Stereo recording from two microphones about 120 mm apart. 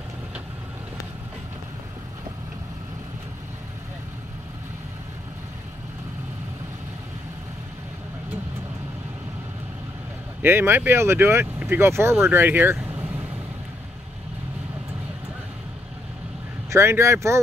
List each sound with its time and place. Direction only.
10.4 s speech: 20° right (ahead or behind)
16.7 s speech: 25° right (ahead or behind)